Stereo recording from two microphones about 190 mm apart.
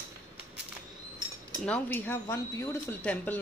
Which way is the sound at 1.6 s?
10° left (ahead or behind).